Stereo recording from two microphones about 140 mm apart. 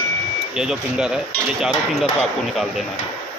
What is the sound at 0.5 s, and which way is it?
Speech, 5° right (ahead or behind).